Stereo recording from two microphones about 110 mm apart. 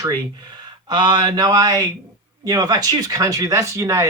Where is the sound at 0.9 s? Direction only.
45° right (ahead or behind).